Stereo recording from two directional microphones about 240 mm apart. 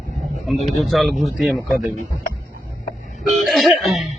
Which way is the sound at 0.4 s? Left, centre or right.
Centre.